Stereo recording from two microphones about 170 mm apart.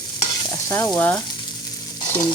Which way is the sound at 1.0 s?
15° left (ahead or behind).